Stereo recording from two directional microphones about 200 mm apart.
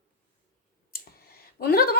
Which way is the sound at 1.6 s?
50° left (ahead or behind).